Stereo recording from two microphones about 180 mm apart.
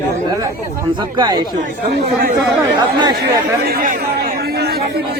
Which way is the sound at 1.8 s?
65° right (ahead or behind).